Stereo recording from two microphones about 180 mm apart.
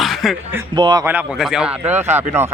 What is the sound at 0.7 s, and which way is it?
Speech, 25° right (ahead or behind).